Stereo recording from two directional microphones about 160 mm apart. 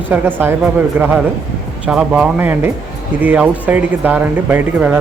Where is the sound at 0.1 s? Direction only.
10° right (ahead or behind).